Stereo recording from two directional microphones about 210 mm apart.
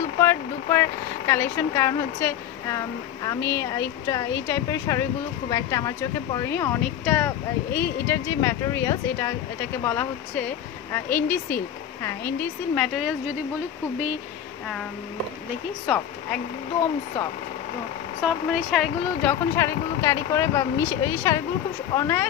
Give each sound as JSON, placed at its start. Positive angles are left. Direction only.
{"t": 0.2, "sound": "speech", "side_deg": 10}
{"t": 15.9, "sound": "speech", "side_deg": 0}
{"t": 18.2, "sound": "speech", "side_deg": 0}
{"t": 19.5, "sound": "speech", "side_deg": 15}